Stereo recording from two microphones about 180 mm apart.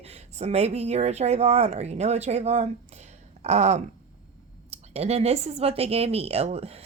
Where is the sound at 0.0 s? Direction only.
35° right (ahead or behind).